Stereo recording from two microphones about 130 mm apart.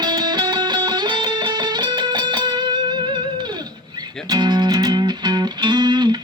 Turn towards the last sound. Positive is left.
turn(degrees=-35)  # may be behind; listen again after turning